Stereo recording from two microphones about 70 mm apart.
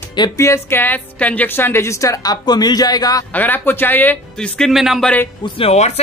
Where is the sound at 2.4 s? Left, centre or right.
Left.